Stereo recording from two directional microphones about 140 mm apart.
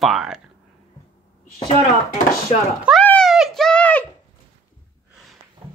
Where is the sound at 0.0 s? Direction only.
Centre (ahead or behind).